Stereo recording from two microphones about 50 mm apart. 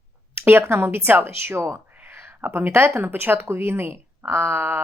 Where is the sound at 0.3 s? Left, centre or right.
Right.